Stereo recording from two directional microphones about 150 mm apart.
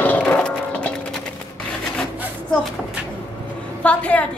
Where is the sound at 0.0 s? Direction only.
10° left (ahead or behind).